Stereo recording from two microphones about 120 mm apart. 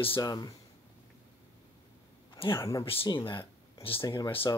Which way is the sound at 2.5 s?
30° left (ahead or behind).